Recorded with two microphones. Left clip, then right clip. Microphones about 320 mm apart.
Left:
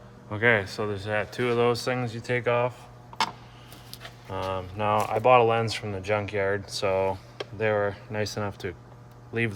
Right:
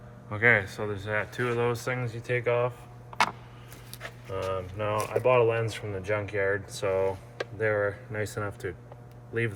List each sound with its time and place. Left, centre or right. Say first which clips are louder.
0.3 s speech: even; left
4.3 s speech: left 1 dB; left